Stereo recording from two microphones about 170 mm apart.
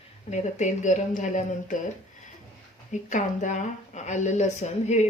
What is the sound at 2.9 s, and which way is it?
Speech, 45° left (ahead or behind).